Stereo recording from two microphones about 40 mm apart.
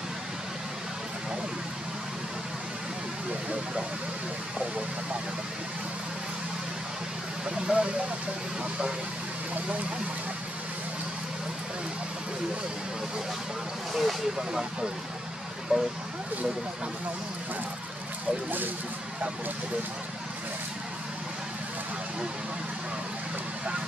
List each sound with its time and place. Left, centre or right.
7.4 s speech: right
13.9 s speech: centre
15.7 s speech: centre